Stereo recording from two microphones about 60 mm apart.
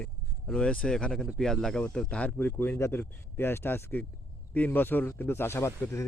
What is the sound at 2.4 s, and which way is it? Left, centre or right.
Speech, left.